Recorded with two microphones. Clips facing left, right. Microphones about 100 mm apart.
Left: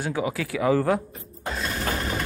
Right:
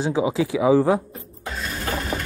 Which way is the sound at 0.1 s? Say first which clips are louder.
Right 6 dB; 20° right (ahead or behind).